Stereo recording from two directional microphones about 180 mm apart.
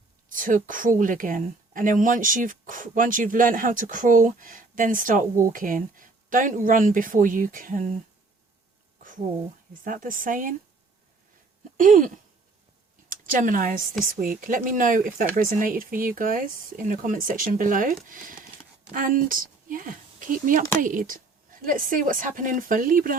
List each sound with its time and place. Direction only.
0.3 s a woman's voice: 50° right (ahead or behind)
9.8 s a woman's voice: 50° right (ahead or behind)
11.8 s a woman's voice: 45° right (ahead or behind)